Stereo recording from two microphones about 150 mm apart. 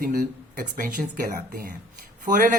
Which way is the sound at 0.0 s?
70° right (ahead or behind).